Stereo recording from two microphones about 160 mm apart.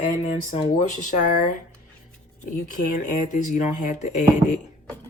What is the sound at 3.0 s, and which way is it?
A woman's voice, 55° left (ahead or behind).